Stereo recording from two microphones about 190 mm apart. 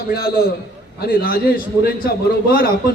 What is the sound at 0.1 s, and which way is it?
A man's voice, 55° left (ahead or behind).